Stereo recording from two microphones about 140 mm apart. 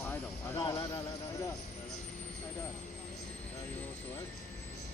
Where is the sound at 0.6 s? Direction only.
25° left (ahead or behind).